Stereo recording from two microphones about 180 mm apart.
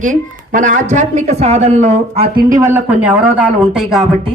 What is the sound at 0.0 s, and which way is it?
Speech, 45° right (ahead or behind).